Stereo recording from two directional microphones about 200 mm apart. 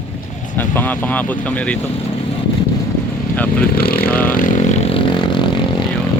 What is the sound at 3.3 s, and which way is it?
Vehicle, 10° left (ahead or behind).